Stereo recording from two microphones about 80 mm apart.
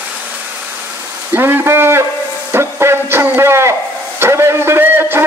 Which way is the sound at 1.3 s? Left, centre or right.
Right.